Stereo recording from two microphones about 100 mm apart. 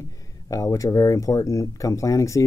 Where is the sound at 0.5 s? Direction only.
35° left (ahead or behind).